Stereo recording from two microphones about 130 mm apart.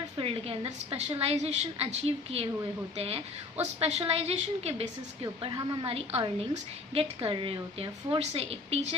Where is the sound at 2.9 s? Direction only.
50° right (ahead or behind).